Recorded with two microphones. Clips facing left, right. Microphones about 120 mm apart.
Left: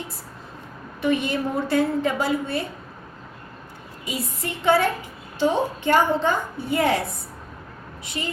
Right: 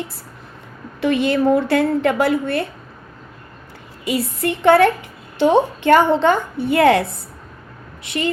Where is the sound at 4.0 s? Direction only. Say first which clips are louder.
Right 9 dB; 70° right (ahead or behind).